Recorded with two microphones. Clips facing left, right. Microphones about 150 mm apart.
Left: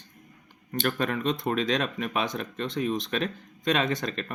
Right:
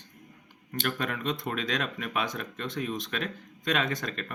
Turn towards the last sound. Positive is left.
turn(degrees=25)  # may be behind; listen again after turning